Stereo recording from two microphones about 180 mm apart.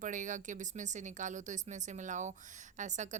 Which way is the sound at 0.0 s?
45° right (ahead or behind).